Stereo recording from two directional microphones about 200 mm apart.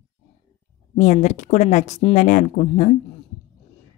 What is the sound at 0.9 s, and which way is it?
Speech, 35° left (ahead or behind).